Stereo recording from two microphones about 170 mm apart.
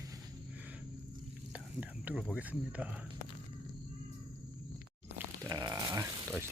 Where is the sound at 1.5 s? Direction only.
5° right (ahead or behind).